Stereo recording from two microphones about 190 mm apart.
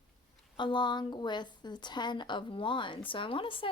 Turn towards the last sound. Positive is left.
turn(degrees=25)  # may be behind; listen again after turning